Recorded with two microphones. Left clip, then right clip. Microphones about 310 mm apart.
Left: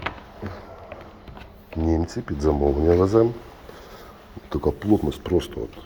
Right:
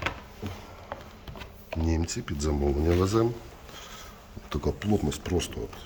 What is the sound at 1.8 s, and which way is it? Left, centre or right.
Speech, centre.